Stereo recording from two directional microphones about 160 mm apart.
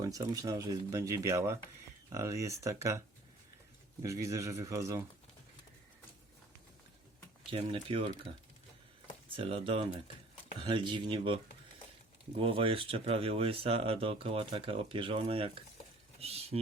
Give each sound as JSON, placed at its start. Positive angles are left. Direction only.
{"t": 0.0, "sound": "speech", "side_deg": -20}
{"t": 4.0, "sound": "speech", "side_deg": -20}
{"t": 7.5, "sound": "speech", "side_deg": -35}
{"t": 9.3, "sound": "speech", "side_deg": -35}